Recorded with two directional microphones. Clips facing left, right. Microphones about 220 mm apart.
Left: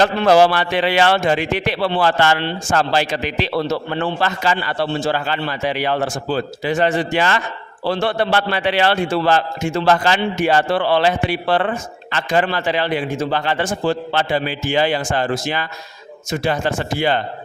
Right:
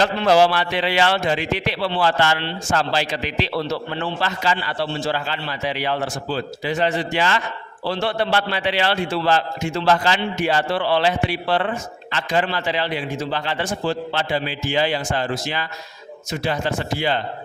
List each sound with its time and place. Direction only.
0.0 s a man's voice: 55° left (ahead or behind)